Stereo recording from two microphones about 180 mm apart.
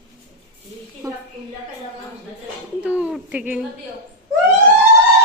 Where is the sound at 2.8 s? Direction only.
5° right (ahead or behind).